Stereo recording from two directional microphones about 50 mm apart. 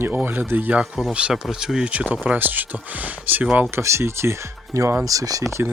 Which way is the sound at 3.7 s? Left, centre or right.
Right.